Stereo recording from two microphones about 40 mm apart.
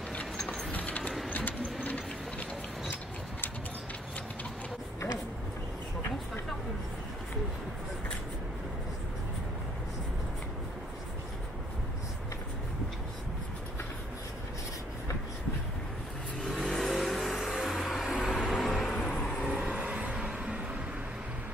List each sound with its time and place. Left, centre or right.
1.3 s sewing machine: left
16.3 s vehicle: centre
19.4 s vehicle: right
20.2 s a sound: right